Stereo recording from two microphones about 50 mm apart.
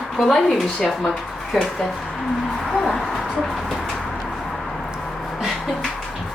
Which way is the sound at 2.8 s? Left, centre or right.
Centre.